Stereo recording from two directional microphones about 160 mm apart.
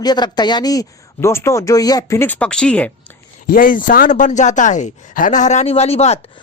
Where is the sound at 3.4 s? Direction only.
60° left (ahead or behind); by 6.3 s 40° left (ahead or behind).